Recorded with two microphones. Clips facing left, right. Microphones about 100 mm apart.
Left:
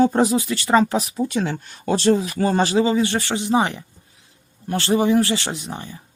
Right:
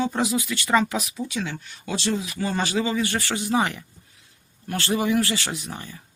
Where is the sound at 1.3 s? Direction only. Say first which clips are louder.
Left 6 dB; 50° left (ahead or behind); by 6.0 s 25° left (ahead or behind).